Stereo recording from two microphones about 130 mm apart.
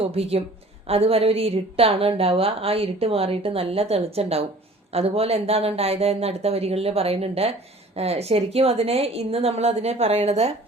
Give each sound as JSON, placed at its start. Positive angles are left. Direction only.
{"t": 0.0, "sound": "a woman's voice", "side_deg": -50}